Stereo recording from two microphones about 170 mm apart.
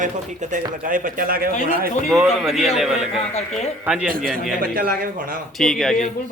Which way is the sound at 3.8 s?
5° right (ahead or behind).